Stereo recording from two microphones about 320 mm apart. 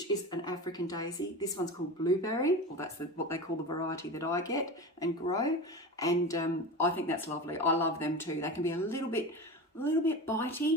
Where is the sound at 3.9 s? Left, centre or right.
Centre.